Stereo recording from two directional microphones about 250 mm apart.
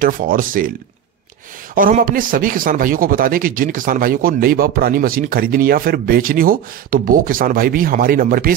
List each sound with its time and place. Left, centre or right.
0.0 s speech: right
1.8 s speech: right